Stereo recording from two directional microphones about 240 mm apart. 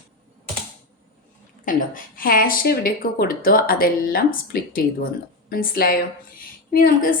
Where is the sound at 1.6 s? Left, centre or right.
Left.